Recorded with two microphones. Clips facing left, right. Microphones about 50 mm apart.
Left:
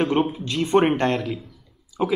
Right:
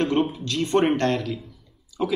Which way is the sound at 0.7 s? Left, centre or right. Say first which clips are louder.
Left 2 dB; centre.